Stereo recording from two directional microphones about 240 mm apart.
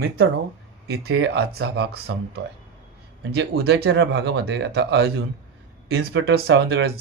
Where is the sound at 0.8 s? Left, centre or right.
Right.